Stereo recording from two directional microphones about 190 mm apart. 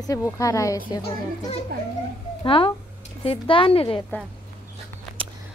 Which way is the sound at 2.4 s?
30° left (ahead or behind).